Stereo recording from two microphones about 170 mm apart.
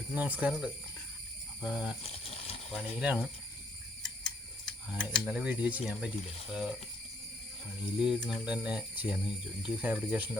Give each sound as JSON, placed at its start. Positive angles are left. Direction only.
{"t": 0.1, "sound": "speech", "side_deg": -10}
{"t": 1.7, "sound": "speech", "side_deg": -5}
{"t": 2.0, "sound": "a sound", "side_deg": 35}
{"t": 2.7, "sound": "speech", "side_deg": -5}
{"t": 4.6, "sound": "speech", "side_deg": 5}
{"t": 7.8, "sound": "speech", "side_deg": -5}